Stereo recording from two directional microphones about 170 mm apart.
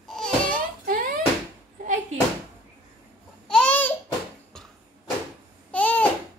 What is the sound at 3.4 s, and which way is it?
Babbling, 5° left (ahead or behind).